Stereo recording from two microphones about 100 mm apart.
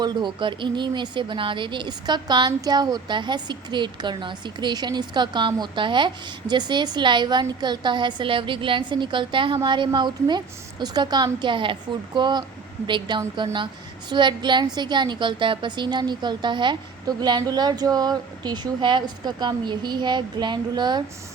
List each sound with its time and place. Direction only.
0.0 s a woman's voice: 50° right (ahead or behind)